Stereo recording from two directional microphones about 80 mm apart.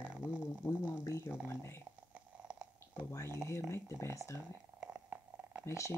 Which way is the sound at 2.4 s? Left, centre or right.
Centre.